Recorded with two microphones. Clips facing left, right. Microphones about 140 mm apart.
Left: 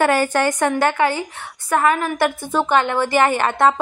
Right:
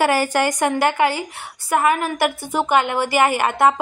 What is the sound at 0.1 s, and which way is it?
A woman's voice, 10° right (ahead or behind).